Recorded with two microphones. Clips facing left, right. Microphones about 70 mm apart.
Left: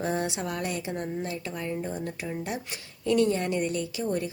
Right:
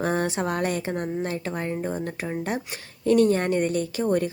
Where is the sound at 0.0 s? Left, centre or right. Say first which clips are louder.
Right 4 dB; right.